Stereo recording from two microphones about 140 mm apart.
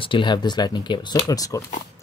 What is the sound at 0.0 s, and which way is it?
Speech, 35° left (ahead or behind).